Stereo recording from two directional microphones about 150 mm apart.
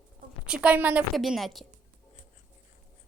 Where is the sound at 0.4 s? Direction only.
5° right (ahead or behind).